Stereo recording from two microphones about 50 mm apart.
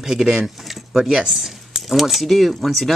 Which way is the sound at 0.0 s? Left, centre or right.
Centre.